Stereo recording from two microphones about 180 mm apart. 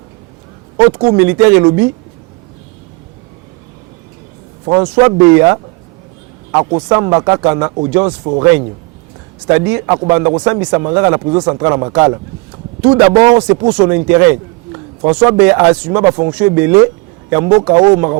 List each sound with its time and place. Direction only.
0.8 s a man's voice: 25° right (ahead or behind)
1.1 s speech: 10° right (ahead or behind)
4.6 s a man's voice: 20° right (ahead or behind)
6.7 s a man's voice: 25° right (ahead or behind)
9.5 s a man's voice: 15° right (ahead or behind)